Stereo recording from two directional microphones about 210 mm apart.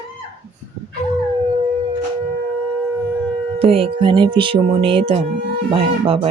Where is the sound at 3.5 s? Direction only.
25° right (ahead or behind).